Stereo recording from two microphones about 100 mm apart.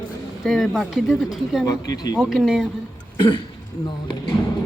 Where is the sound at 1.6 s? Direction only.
40° left (ahead or behind).